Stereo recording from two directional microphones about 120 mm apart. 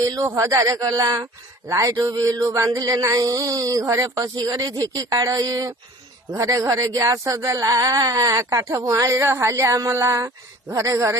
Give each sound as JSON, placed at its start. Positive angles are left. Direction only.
{"t": 0.0, "sound": "speech", "side_deg": -25}